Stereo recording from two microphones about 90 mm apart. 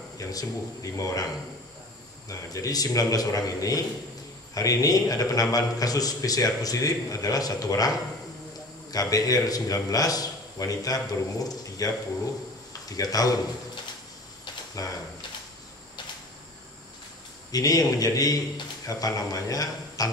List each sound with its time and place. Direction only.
0.2 s a man's voice: 40° left (ahead or behind)
2.2 s a man's voice: 40° left (ahead or behind)
8.9 s a man's voice: 40° left (ahead or behind)
14.8 s a man's voice: 40° left (ahead or behind)
17.5 s a man's voice: 45° left (ahead or behind)